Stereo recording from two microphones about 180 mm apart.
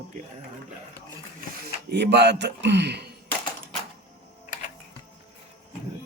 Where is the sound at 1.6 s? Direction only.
65° right (ahead or behind).